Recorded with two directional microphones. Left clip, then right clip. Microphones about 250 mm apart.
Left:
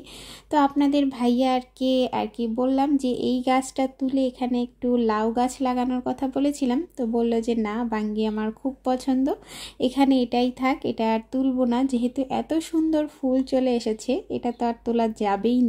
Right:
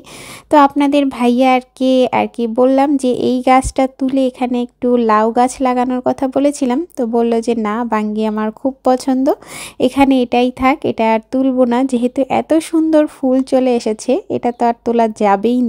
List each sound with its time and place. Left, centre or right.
0.5 s speech: right